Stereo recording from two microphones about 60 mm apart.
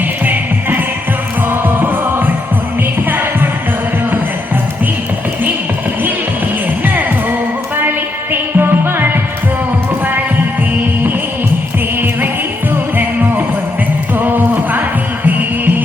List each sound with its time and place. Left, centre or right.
1.5 s music: right
6.8 s music: right
14.2 s music: right